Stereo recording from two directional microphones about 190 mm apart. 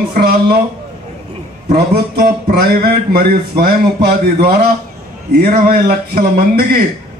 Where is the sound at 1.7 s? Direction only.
55° right (ahead or behind).